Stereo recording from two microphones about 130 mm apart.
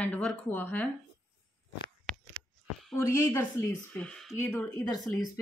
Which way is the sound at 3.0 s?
20° left (ahead or behind).